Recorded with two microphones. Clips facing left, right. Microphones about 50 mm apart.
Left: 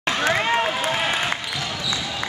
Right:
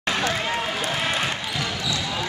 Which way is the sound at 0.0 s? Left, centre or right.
Left.